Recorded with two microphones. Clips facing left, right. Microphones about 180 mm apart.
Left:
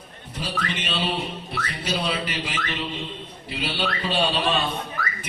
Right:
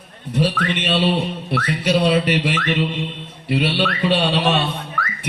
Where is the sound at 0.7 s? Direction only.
70° right (ahead or behind).